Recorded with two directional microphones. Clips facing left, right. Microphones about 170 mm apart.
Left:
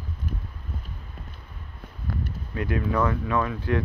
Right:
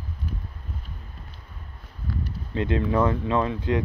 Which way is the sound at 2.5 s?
25° right (ahead or behind).